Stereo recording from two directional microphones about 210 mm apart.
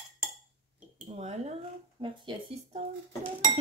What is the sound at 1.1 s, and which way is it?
Speech, 30° right (ahead or behind).